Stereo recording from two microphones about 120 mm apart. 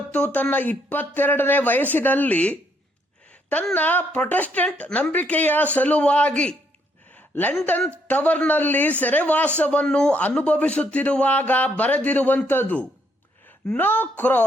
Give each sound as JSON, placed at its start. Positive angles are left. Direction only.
{"t": 0.1, "sound": "a man's voice", "side_deg": 15}
{"t": 3.8, "sound": "a man's voice", "side_deg": 15}
{"t": 7.1, "sound": "a sound", "side_deg": 15}
{"t": 7.6, "sound": "a man's voice", "side_deg": 15}